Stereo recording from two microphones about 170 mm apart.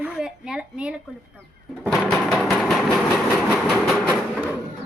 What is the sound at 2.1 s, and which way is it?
Train, centre (ahead or behind).